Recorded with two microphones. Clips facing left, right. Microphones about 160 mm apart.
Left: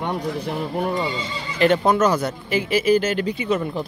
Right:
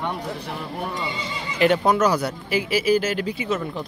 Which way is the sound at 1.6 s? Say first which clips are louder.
Left 1 dB; 10° right (ahead or behind).